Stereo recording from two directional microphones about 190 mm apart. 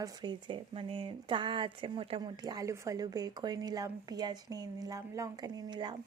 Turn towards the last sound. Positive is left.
turn(degrees=-25)  # may be behind; listen again after turning